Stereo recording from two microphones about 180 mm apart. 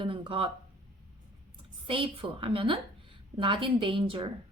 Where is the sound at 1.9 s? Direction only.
30° right (ahead or behind).